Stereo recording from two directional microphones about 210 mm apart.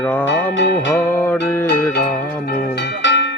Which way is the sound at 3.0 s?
60° left (ahead or behind).